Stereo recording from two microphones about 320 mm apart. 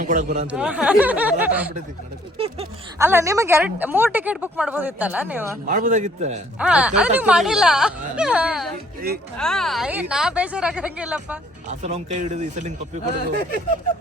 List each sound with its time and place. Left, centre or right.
0.0 s speech: right
0.4 s speech: centre
2.4 s a sound: centre
3.1 s speech: centre
5.6 s a man's voice: right
6.6 s speech: centre
11.8 s a man's voice: centre